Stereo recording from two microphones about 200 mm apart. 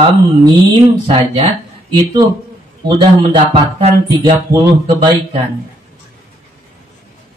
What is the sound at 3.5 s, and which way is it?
Mantra, 25° right (ahead or behind).